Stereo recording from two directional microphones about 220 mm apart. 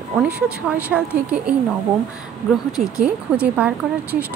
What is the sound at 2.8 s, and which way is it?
Speech, 5° right (ahead or behind).